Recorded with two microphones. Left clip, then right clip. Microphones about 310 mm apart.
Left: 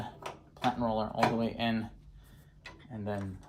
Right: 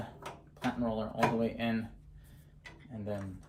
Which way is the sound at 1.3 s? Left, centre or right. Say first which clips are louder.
Left 1 dB; centre.